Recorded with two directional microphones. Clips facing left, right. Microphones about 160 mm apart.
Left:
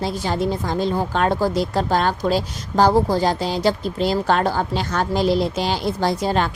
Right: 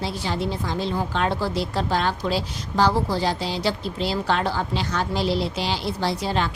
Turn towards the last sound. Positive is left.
turn(degrees=45)  # may be behind; listen again after turning